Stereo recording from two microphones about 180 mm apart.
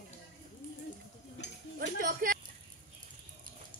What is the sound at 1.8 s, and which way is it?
Music, 50° right (ahead or behind).